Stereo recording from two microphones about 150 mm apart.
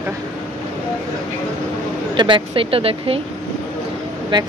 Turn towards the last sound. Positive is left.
turn(degrees=-30)  # may be behind; listen again after turning